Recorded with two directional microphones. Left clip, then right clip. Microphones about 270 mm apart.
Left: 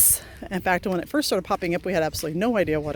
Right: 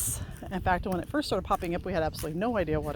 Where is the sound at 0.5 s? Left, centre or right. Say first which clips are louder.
Left 5 dB; left.